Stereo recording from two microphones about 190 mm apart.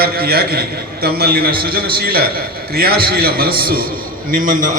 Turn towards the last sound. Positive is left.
turn(degrees=-45)  # may be behind; listen again after turning